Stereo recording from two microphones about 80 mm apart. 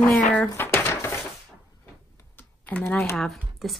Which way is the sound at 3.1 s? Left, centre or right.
Centre.